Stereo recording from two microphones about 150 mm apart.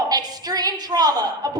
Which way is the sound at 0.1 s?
25° right (ahead or behind).